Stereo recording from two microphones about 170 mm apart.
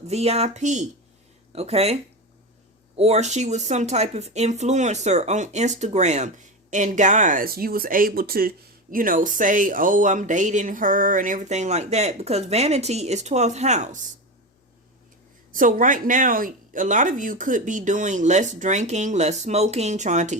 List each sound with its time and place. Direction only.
0.1 s speech: 40° right (ahead or behind)
15.5 s speech: 50° right (ahead or behind)